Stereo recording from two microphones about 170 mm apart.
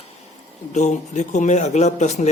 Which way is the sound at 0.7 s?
45° left (ahead or behind).